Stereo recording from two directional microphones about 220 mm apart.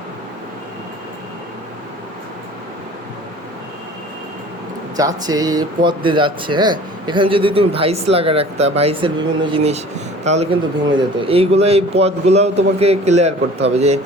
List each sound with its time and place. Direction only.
4.9 s speech: 15° right (ahead or behind)